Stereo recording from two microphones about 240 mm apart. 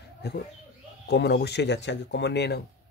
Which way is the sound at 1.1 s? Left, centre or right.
Left.